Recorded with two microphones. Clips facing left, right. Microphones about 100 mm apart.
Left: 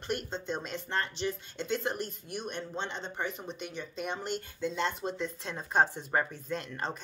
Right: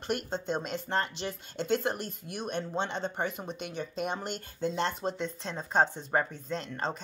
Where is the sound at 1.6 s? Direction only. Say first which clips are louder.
Right 3 dB; 50° right (ahead or behind).